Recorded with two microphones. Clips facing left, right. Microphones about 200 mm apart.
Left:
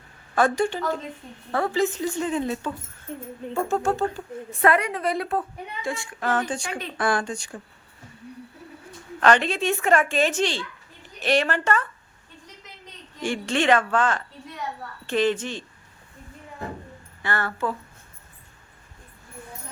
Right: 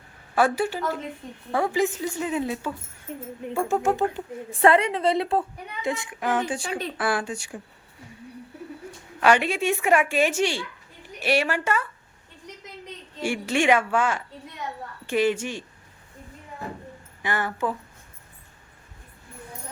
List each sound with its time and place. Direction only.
0.3 s a woman's voice: 5° right (ahead or behind)
4.6 s a woman's voice: 25° right (ahead or behind); by 7.6 s 10° right (ahead or behind)
9.2 s a woman's voice: 10° right (ahead or behind)
13.2 s a woman's voice: 10° right (ahead or behind)
17.2 s a woman's voice: 15° right (ahead or behind)